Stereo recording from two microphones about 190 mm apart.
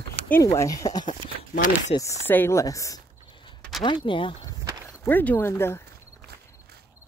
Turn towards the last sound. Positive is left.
turn(degrees=10)  # may be behind; listen again after turning